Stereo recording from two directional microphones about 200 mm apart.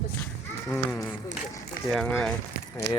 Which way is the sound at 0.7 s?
5° left (ahead or behind).